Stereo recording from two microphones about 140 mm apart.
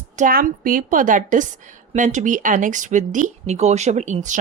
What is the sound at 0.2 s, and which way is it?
A woman's voice, 80° right.